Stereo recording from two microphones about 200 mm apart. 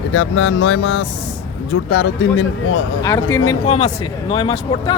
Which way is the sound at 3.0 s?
15° left (ahead or behind).